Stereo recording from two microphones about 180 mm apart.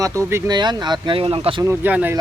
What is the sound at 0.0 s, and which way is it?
Speech, 15° right (ahead or behind).